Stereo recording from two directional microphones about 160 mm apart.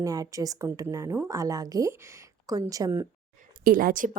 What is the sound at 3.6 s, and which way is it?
Speech, 60° right (ahead or behind).